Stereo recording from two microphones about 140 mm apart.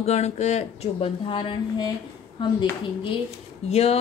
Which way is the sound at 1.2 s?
35° left (ahead or behind).